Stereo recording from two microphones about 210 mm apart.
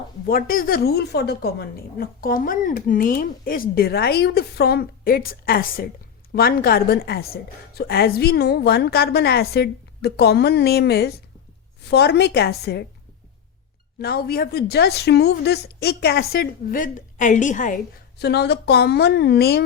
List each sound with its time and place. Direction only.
0.3 s a woman's voice: 45° left (ahead or behind)
14.0 s a woman's voice: 45° left (ahead or behind)
18.2 s a woman's voice: 50° left (ahead or behind)